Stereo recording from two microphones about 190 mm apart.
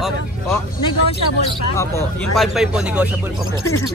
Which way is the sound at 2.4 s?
Centre (ahead or behind).